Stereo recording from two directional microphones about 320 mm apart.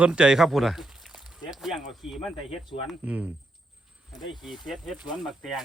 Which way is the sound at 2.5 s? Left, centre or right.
Centre.